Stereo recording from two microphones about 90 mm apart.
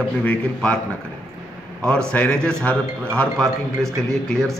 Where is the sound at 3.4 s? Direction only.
5° left (ahead or behind).